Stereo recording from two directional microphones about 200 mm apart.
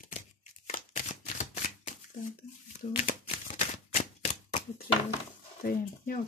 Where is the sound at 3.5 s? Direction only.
35° left (ahead or behind).